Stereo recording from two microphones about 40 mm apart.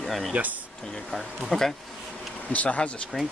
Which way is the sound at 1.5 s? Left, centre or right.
Centre.